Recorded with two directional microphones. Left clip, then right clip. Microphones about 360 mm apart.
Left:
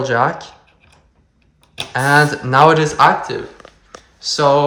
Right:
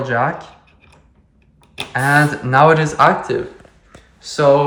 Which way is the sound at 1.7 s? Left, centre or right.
Centre.